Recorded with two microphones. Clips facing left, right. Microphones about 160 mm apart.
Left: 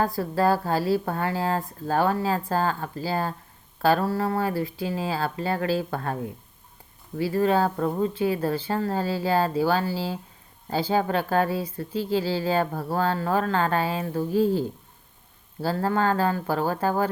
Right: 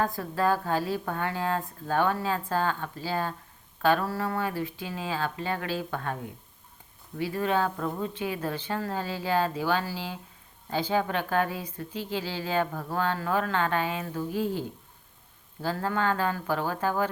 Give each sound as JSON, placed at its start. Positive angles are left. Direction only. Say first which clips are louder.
{"t": 0.0, "sound": "speech", "louder": "left 4 dB", "side_deg": 35}
{"t": 7.2, "sound": "speech", "louder": "left 5 dB", "side_deg": 35}
{"t": 15.6, "sound": "speech", "louder": "left 4 dB", "side_deg": 35}